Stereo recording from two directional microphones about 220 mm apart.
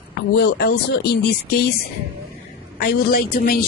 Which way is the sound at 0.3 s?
45° left (ahead or behind).